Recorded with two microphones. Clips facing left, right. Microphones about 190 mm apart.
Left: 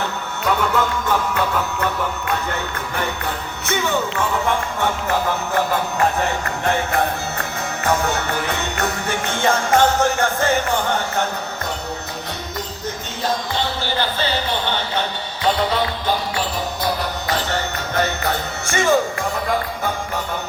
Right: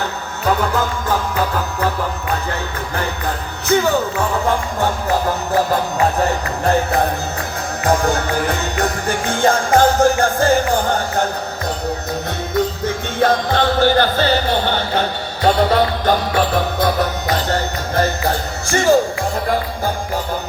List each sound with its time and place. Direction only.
0.4 s music: 35° right (ahead or behind)
3.7 s music: 35° right (ahead or behind)
13.1 s music: 55° right (ahead or behind); by 18.9 s 35° right (ahead or behind)